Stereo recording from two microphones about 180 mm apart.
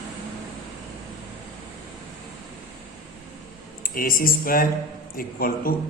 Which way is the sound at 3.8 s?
50° left (ahead or behind).